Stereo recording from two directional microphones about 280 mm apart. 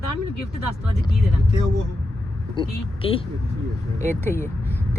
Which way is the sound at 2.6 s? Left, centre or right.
Centre.